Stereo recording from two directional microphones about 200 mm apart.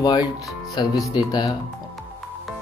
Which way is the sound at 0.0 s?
20° left (ahead or behind).